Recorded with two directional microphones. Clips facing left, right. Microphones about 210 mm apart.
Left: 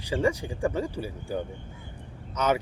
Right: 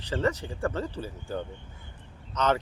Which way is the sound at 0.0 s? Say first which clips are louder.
Left 2 dB; 10° left (ahead or behind).